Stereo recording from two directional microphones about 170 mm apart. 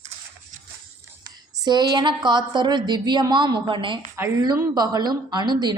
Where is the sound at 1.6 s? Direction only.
25° right (ahead or behind).